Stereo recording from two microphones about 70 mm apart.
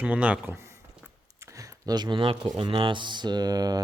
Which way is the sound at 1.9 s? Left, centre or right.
Right.